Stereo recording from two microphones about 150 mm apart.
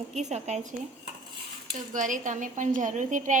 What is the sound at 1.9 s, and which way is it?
A woman's voice, 60° right (ahead or behind).